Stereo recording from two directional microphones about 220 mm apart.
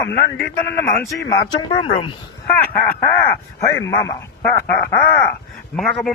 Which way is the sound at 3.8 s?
15° left (ahead or behind).